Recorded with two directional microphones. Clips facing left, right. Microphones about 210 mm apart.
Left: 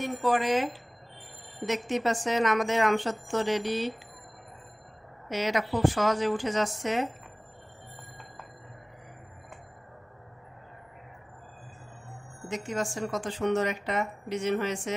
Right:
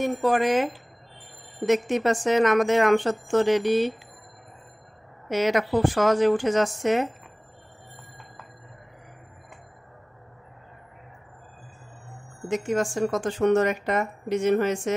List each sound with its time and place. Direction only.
0.0 s a woman's voice: 50° right (ahead or behind)
1.7 s a woman's voice: 50° right (ahead or behind)
5.3 s a woman's voice: 50° right (ahead or behind)
12.4 s a woman's voice: 50° right (ahead or behind)